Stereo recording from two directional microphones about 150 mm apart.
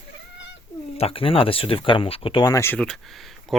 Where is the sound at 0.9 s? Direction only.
40° left (ahead or behind).